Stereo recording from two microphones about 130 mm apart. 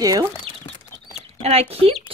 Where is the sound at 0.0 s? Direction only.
30° right (ahead or behind).